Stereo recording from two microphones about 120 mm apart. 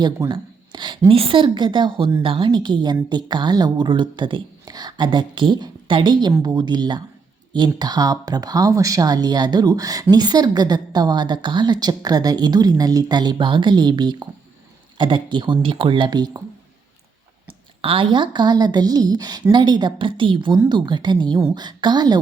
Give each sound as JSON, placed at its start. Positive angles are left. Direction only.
{"t": 0.0, "sound": "a woman's voice", "side_deg": -35}
{"t": 17.8, "sound": "speech", "side_deg": -45}